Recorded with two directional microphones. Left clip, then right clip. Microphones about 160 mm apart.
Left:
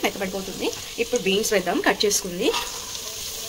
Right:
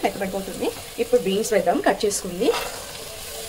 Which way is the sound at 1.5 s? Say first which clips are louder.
Right 6 dB; centre (ahead or behind).